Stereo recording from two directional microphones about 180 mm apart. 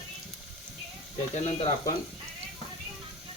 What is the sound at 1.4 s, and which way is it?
Frying, 40° left (ahead or behind).